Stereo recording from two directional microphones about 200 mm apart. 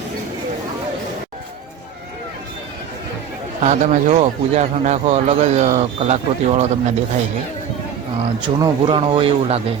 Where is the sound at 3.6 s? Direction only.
35° right (ahead or behind).